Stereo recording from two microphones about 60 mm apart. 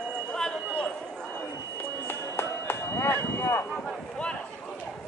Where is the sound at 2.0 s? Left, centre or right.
Left.